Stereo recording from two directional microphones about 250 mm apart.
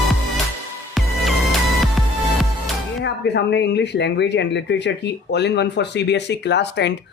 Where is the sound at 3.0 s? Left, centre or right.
Left.